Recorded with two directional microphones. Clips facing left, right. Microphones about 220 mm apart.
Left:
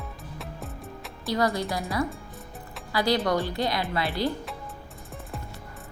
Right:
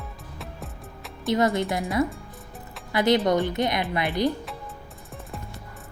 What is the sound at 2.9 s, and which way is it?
A woman's voice, 20° right (ahead or behind).